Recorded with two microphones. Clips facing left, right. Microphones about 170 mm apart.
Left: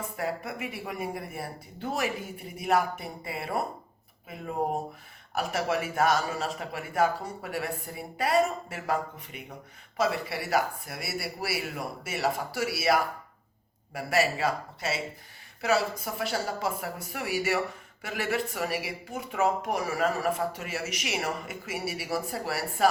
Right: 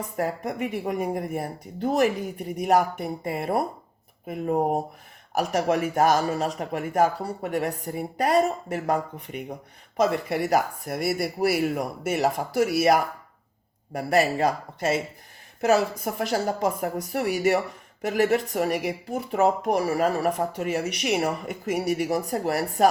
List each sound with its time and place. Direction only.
0.2 s speech: 40° right (ahead or behind)
10.0 s speech: 50° right (ahead or behind)
13.9 s speech: 40° right (ahead or behind)